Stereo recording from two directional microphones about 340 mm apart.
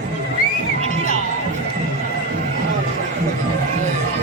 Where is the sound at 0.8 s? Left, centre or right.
Centre.